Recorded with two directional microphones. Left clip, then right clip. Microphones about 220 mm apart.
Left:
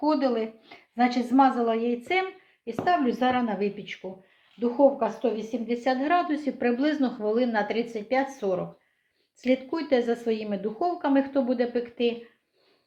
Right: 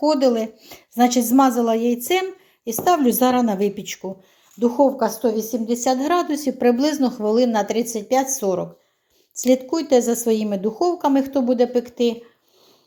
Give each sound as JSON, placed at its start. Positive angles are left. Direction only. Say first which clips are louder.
{"t": 0.1, "sound": "a woman's voice", "louder": "right 7 dB", "side_deg": -45}